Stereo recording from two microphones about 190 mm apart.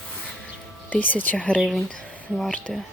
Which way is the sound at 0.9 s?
10° left (ahead or behind).